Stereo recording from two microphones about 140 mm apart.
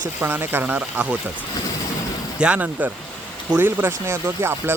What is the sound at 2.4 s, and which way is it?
Speech, 10° right (ahead or behind).